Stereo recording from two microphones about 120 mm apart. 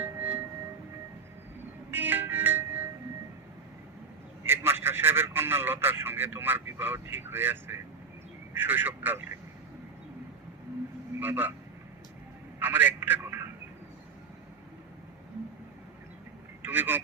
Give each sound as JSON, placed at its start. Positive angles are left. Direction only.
{"t": 0.0, "sound": "singing bowl", "side_deg": -15}
{"t": 1.9, "sound": "music", "side_deg": -15}
{"t": 4.4, "sound": "a man's voice", "side_deg": -20}
{"t": 11.2, "sound": "speech", "side_deg": -15}
{"t": 12.5, "sound": "telephone", "side_deg": -15}
{"t": 16.6, "sound": "speech", "side_deg": -15}